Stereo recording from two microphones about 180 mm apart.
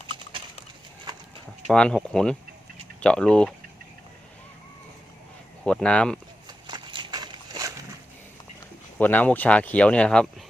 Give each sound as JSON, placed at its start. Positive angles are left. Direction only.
{"t": 1.1, "sound": "clip-clop", "side_deg": -25}
{"t": 1.6, "sound": "speech", "side_deg": 5}
{"t": 5.6, "sound": "speech", "side_deg": 5}
{"t": 6.7, "sound": "a sound", "side_deg": -25}
{"t": 9.0, "sound": "speech", "side_deg": 10}